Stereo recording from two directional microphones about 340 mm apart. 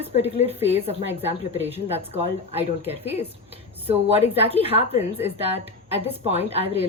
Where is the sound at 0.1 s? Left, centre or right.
Centre.